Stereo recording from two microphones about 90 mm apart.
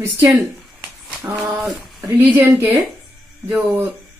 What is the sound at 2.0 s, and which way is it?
Speech, 20° right (ahead or behind).